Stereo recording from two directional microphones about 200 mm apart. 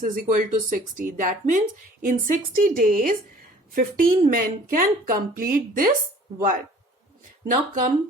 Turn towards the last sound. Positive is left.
turn(degrees=-40)  # may be behind; listen again after turning